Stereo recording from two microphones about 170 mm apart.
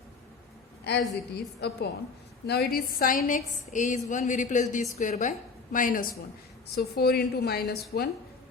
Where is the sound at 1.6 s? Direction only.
75° left (ahead or behind).